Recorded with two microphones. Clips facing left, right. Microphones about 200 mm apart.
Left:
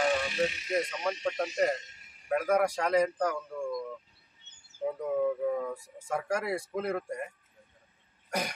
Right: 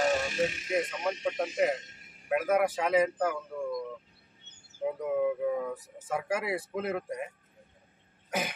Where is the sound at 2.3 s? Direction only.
5° right (ahead or behind).